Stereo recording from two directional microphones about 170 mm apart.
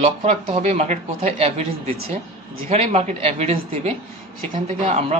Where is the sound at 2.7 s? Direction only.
35° right (ahead or behind).